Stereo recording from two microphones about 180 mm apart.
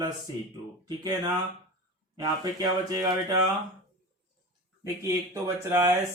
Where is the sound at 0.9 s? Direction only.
20° right (ahead or behind).